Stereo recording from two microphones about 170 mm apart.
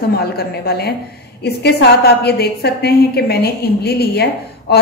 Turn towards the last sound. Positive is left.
turn(degrees=70)  # may be behind; listen again after turning